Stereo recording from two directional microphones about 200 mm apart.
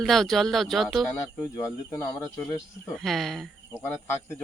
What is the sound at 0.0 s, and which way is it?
Speech, centre (ahead or behind).